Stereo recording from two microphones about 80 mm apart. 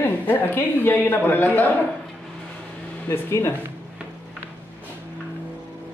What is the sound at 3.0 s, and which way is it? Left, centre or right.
Speech, left.